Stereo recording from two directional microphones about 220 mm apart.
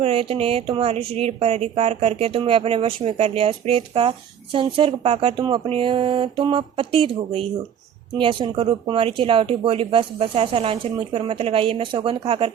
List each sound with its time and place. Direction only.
0.0 s speech: 25° right (ahead or behind)